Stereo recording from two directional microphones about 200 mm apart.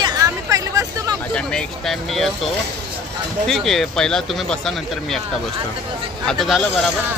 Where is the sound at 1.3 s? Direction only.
5° left (ahead or behind).